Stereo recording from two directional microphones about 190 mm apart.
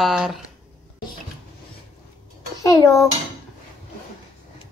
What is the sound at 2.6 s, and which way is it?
Dishes, 15° left (ahead or behind).